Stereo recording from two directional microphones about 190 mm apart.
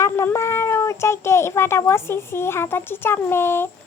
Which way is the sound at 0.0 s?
10° left (ahead or behind).